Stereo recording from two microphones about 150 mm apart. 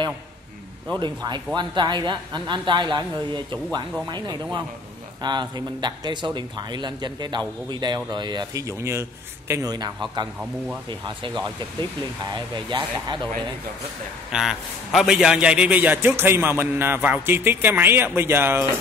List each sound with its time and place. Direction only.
0.9 s speech: 30° right (ahead or behind)
12.4 s speech: 30° right (ahead or behind)
14.3 s a man's voice: centre (ahead or behind)